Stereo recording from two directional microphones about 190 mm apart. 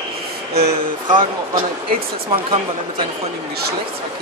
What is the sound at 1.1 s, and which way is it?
Speech, 25° right (ahead or behind).